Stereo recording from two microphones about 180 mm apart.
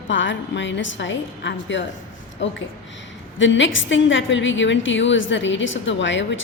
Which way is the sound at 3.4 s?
90° left.